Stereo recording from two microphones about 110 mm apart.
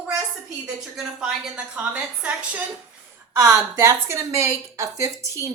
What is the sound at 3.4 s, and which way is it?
Speech, 30° right (ahead or behind).